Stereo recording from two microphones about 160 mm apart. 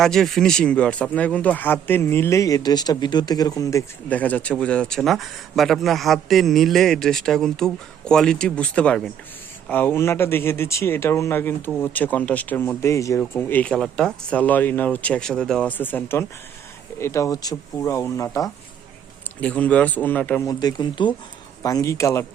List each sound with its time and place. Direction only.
0.0 s speech: centre (ahead or behind); by 18.5 s 20° left (ahead or behind)
19.4 s speech: 10° left (ahead or behind)
20.5 s speech: 25° left (ahead or behind)